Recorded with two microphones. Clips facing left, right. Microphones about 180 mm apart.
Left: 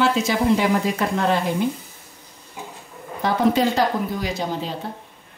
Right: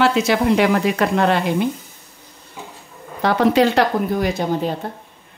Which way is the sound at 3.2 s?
70° right (ahead or behind).